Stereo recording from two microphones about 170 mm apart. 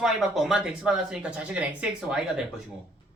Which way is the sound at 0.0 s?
Centre (ahead or behind).